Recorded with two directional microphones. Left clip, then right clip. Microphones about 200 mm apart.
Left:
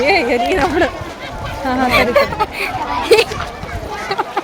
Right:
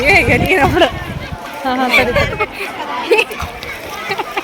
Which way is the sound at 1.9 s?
45° left (ahead or behind).